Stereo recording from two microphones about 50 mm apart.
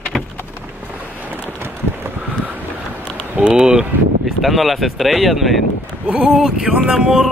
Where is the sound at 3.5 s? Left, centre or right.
Centre.